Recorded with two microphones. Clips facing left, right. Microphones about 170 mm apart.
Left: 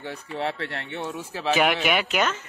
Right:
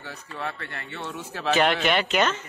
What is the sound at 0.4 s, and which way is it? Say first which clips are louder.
Speech: left 5 dB; 80° left.